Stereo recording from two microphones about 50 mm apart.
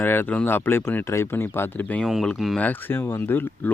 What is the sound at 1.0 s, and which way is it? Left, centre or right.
Speech, left.